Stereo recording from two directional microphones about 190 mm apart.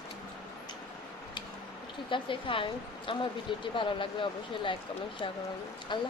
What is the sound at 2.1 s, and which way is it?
Speech, 25° left (ahead or behind).